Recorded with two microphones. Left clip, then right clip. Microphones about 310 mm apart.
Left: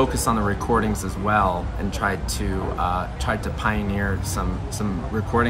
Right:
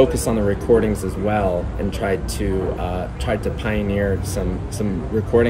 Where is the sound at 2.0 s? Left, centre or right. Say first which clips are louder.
Right 2 dB; left.